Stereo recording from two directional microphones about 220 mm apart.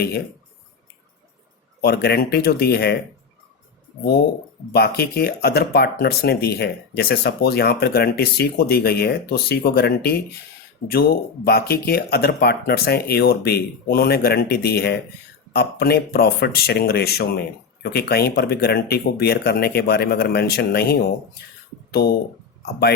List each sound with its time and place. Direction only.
1.8 s speech: 45° left (ahead or behind)
4.7 s speech: 45° left (ahead or behind)